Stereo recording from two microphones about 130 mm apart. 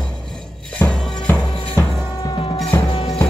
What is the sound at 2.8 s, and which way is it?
Music, 35° left (ahead or behind).